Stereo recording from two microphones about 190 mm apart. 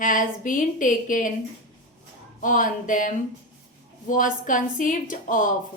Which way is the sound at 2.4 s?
45° left (ahead or behind).